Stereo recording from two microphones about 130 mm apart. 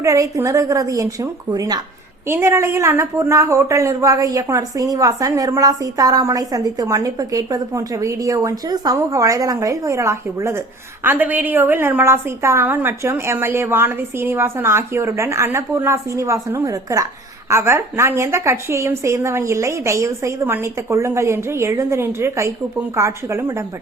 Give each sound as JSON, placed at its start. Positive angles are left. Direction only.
{"t": 0.0, "sound": "speech", "side_deg": -25}